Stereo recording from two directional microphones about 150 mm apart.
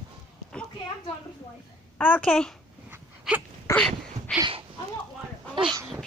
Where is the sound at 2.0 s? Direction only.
10° left (ahead or behind).